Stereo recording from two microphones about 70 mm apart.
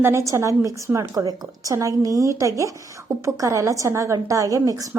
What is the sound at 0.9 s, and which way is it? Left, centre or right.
A woman's voice, right.